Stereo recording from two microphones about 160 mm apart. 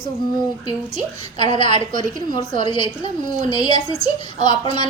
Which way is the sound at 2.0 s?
30° left (ahead or behind).